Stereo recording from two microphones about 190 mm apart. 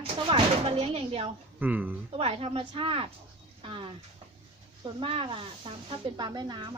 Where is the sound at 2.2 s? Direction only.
30° right (ahead or behind).